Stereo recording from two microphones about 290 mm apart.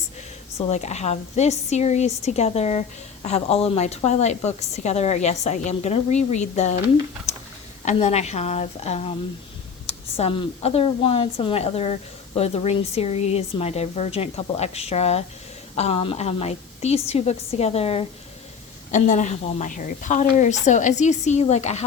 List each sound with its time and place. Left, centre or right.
0.7 s speech: left
7.9 s speech: left